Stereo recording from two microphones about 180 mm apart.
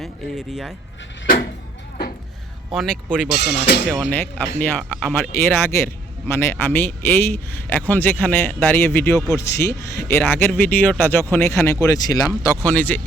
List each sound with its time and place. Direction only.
2.7 s speech: 5° left (ahead or behind)
3.2 s speech: 70° left (ahead or behind)
3.8 s speech: centre (ahead or behind)
4.1 s speech: 10° left (ahead or behind)